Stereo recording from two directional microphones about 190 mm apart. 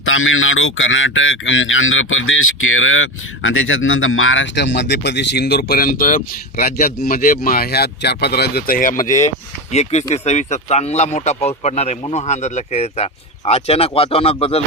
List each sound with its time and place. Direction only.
0.0 s speech: 90° left; by 14.6 s 30° left (ahead or behind)